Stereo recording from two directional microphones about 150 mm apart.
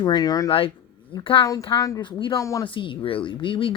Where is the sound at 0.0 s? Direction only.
25° left (ahead or behind).